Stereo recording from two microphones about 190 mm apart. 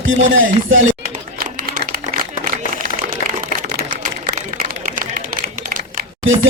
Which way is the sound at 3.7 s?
45° right (ahead or behind).